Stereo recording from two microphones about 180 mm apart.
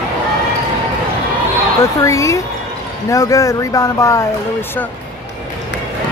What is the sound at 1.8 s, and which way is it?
Speech, 15° left (ahead or behind).